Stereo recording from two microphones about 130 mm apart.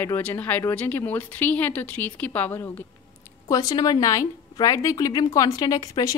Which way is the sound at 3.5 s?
25° left (ahead or behind).